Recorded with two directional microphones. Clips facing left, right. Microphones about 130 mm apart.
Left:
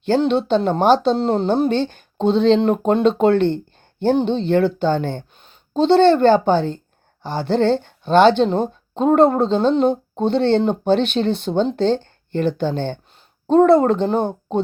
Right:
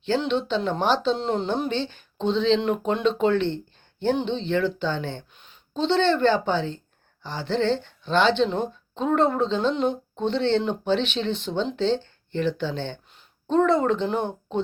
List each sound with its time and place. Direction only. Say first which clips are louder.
0.1 s a woman's voice: left 7 dB; 45° left (ahead or behind)